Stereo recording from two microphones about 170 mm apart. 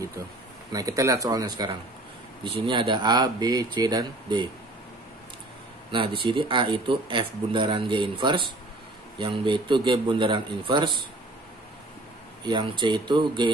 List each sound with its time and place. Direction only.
0.7 s speech: 20° right (ahead or behind)
2.4 s speech: 30° right (ahead or behind)
5.9 s speech: 30° right (ahead or behind)
12.4 s speech: 30° right (ahead or behind)